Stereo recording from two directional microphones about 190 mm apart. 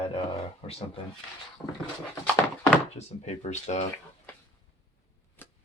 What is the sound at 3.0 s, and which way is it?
Speech, 35° left (ahead or behind).